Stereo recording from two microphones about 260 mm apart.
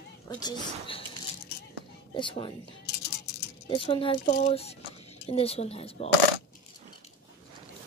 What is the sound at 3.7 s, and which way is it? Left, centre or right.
Speech, left.